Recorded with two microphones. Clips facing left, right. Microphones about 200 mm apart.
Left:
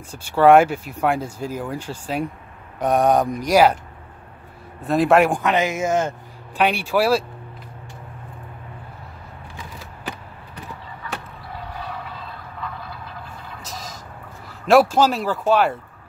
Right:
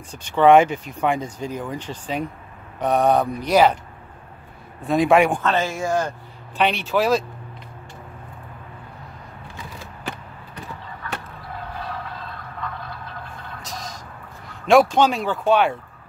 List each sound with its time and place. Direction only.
0.1 s speech: 10° left (ahead or behind)
4.8 s speech: centre (ahead or behind)
5.4 s speech: 15° left (ahead or behind)
6.5 s speech: 10° left (ahead or behind)
13.6 s a sound: centre (ahead or behind)
14.5 s speech: 5° left (ahead or behind)